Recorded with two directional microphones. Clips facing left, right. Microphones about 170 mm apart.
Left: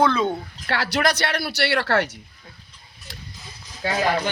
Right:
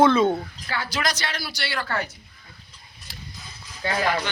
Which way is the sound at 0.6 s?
70° left (ahead or behind).